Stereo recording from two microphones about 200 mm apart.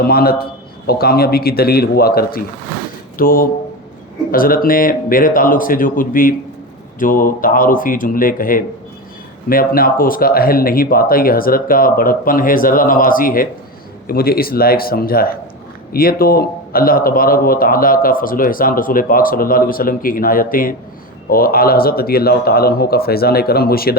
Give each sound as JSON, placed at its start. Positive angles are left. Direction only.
{"t": 0.0, "sound": "a man's voice", "side_deg": 50}